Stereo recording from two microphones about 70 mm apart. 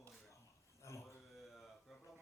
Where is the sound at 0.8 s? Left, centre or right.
Left.